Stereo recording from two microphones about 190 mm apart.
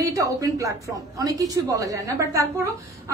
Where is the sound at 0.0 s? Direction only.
15° right (ahead or behind).